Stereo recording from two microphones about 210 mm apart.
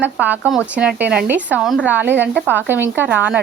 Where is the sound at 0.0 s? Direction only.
5° right (ahead or behind).